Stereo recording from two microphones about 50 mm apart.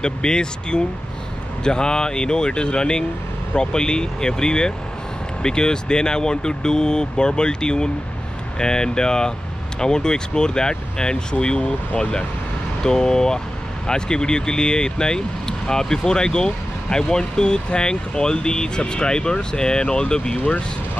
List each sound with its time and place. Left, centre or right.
0.0 s speech: centre